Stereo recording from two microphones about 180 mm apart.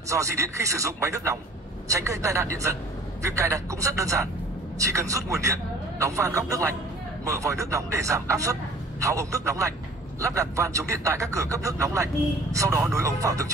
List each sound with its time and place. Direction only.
0.1 s a man's voice: 15° right (ahead or behind)